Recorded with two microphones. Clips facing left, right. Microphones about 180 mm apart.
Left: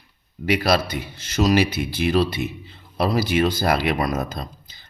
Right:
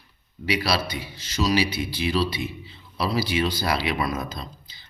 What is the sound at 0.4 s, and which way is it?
A man's voice, 50° left (ahead or behind).